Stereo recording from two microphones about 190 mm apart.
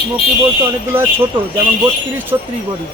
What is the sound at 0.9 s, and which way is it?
Speech, 10° right (ahead or behind).